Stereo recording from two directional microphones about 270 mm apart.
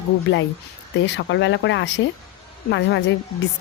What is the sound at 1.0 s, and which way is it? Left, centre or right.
Speech, left.